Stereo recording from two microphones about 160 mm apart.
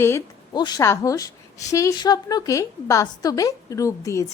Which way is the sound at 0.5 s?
25° left (ahead or behind).